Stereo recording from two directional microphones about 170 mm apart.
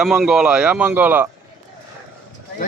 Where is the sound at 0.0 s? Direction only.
5° right (ahead or behind).